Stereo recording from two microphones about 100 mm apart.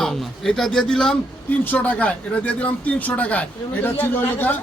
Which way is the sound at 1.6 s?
15° left (ahead or behind).